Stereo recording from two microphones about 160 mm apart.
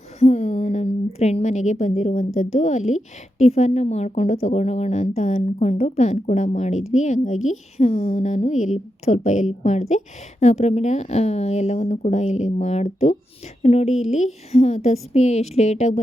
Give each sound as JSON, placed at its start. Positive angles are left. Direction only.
{"t": 0.2, "sound": "a woman's voice", "side_deg": 45}